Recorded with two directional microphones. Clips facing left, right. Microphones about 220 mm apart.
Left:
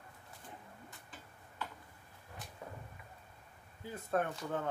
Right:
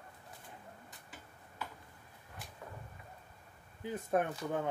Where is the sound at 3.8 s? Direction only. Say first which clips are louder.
Right 2 dB; 15° right (ahead or behind).